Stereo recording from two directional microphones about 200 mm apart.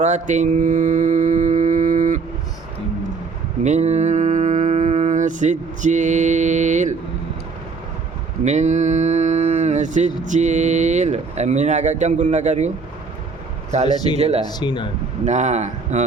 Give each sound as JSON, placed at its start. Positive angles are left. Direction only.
{"t": 0.0, "sound": "mantra", "side_deg": -35}
{"t": 3.6, "sound": "mantra", "side_deg": -35}
{"t": 8.4, "sound": "a man's voice", "side_deg": -35}
{"t": 14.4, "sound": "speech", "side_deg": 20}
{"t": 15.2, "sound": "speech", "side_deg": -35}